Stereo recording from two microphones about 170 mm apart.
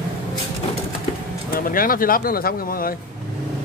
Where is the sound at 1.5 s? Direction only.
55° left (ahead or behind).